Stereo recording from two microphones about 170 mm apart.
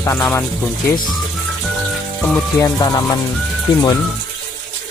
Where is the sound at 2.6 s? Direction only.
20° left (ahead or behind).